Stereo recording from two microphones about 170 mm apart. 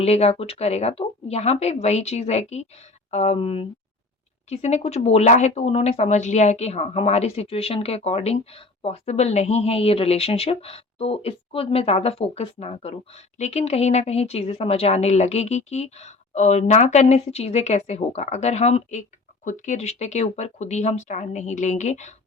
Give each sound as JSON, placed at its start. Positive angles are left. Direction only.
{"t": 0.0, "sound": "speech", "side_deg": 40}